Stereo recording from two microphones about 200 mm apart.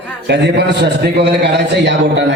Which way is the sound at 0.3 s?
60° right (ahead or behind).